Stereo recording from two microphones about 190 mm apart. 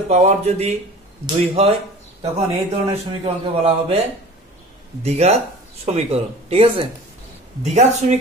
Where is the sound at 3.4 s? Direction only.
30° right (ahead or behind).